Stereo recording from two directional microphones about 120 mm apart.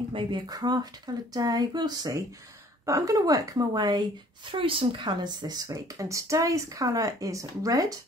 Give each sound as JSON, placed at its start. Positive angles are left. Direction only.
{"t": 0.1, "sound": "speech", "side_deg": -35}
{"t": 4.5, "sound": "speech", "side_deg": -45}